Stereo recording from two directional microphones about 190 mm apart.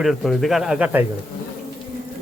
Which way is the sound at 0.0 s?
Centre (ahead or behind).